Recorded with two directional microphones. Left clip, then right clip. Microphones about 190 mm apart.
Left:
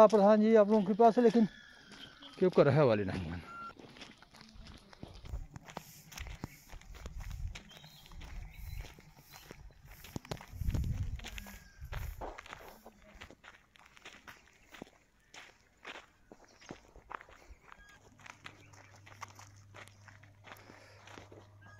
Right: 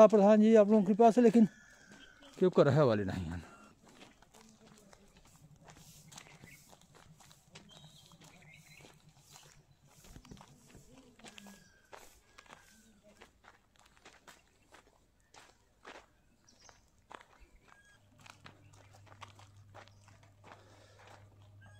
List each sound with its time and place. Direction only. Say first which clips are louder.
0.0 s speech: right 1 dB; 35° right (ahead or behind)
2.4 s speech: even; 15° right (ahead or behind)
4.0 s a sound: left 5 dB; 50° left (ahead or behind)
5.7 s a sound: left 12 dB; 55° left (ahead or behind)
7.5 s a sound: left 5 dB; 60° left (ahead or behind)
10.0 s walk: left 12 dB; 55° left (ahead or behind)
11.9 s walk: left 5 dB; 55° left (ahead or behind)
13.2 s walk: left 7 dB; 60° left (ahead or behind)
19.1 s dog: left 4 dB; 20° left (ahead or behind)